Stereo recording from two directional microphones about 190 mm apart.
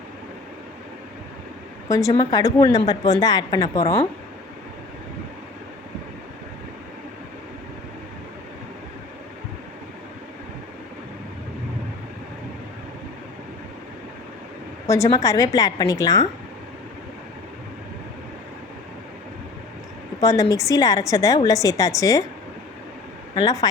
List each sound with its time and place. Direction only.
1.9 s a woman's voice: 15° left (ahead or behind)
14.8 s a woman's voice: 15° left (ahead or behind)
20.2 s a woman's voice: 15° left (ahead or behind)
23.3 s a woman's voice: 20° left (ahead or behind)